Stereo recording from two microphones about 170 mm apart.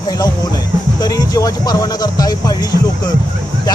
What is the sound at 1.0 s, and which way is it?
Speech, 20° left (ahead or behind).